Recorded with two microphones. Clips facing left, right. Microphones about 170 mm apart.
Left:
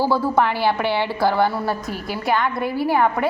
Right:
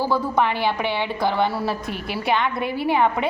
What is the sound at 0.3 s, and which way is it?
A woman's voice, 15° right (ahead or behind).